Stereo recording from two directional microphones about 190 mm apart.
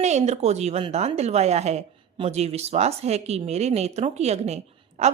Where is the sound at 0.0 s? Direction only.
35° right (ahead or behind).